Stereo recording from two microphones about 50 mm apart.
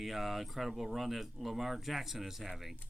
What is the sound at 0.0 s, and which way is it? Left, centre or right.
Speech, centre.